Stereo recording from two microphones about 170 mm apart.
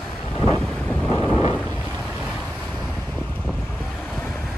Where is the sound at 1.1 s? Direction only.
25° left (ahead or behind).